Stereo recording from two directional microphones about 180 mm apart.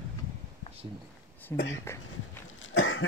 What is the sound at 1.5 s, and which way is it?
Speech, 15° left (ahead or behind).